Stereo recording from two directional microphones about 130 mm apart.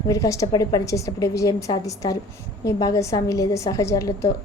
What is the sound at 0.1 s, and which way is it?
A woman's voice, 25° left (ahead or behind).